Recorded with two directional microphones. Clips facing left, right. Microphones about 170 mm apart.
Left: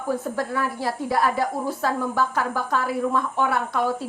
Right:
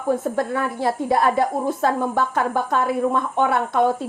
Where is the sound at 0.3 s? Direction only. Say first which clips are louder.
Right 3 dB; 25° right (ahead or behind).